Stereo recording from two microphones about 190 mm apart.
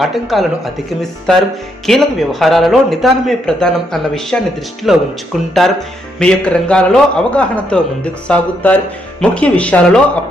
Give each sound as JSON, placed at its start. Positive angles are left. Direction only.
{"t": 0.0, "sound": "a man's voice", "side_deg": 0}
{"t": 1.9, "sound": "a man's voice", "side_deg": 0}